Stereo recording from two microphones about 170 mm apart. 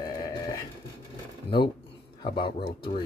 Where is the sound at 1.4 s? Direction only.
30° left (ahead or behind).